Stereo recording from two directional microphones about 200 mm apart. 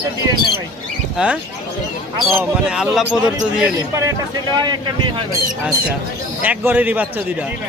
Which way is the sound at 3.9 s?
15° right (ahead or behind).